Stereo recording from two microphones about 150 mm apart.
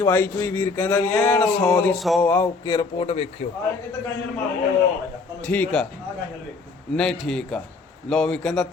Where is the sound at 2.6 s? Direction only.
30° left (ahead or behind).